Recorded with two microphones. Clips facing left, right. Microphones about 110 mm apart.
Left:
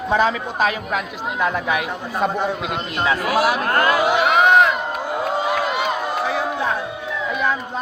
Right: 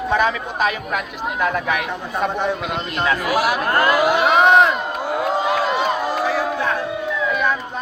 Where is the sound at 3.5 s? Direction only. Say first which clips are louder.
Right 1 dB; 10° right (ahead or behind).